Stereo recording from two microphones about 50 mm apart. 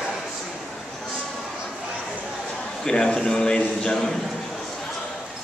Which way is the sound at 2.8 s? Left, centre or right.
Centre.